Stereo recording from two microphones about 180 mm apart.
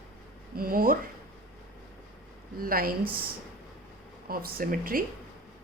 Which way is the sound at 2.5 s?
55° right (ahead or behind).